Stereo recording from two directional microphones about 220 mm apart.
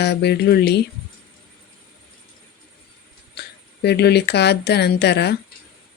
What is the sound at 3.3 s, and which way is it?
Speech, 50° left (ahead or behind).